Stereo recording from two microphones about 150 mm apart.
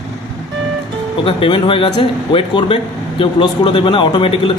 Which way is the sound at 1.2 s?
35° left (ahead or behind).